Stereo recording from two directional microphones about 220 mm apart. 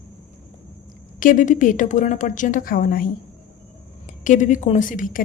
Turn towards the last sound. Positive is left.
turn(degrees=35)  # may be behind; listen again after turning